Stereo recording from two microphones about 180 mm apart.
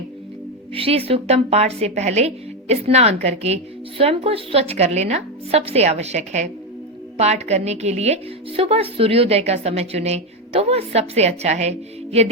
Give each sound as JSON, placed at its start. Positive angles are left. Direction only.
{"t": 0.7, "sound": "a woman's voice", "side_deg": -30}